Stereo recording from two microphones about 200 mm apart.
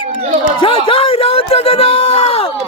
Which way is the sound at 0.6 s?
25° left (ahead or behind).